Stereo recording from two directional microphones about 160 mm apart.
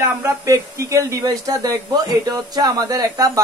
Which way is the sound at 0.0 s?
20° right (ahead or behind).